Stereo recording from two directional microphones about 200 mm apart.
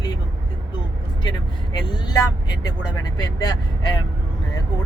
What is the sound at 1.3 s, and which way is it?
Speech, 20° left (ahead or behind).